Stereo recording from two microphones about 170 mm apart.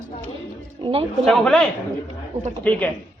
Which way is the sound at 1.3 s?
5° left (ahead or behind).